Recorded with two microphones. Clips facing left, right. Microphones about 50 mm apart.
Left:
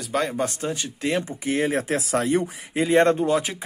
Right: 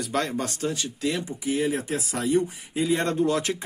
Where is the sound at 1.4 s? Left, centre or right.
Left.